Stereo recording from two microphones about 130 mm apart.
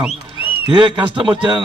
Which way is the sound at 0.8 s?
40° right (ahead or behind).